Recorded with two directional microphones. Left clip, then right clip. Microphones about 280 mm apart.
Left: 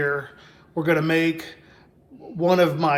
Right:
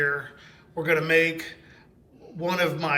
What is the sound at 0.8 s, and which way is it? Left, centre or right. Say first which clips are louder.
A man's voice: even; centre.